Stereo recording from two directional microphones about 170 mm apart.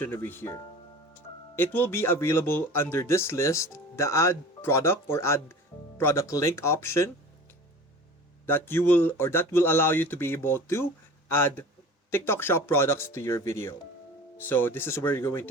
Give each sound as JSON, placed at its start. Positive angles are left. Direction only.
{"t": 0.0, "sound": "speech", "side_deg": 10}
{"t": 8.4, "sound": "speech", "side_deg": 15}